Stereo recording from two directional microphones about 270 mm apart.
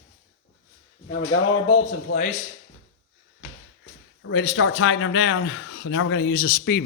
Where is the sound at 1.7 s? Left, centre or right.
Left.